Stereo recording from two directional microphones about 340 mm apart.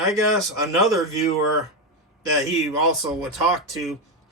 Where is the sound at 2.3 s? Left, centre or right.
Centre.